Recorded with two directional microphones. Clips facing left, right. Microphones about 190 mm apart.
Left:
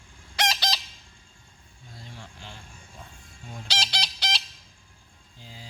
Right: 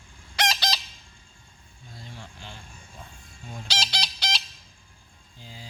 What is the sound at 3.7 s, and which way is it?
Chicken, 30° left (ahead or behind).